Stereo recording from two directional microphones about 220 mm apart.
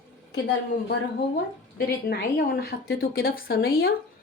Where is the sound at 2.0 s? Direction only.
45° left (ahead or behind).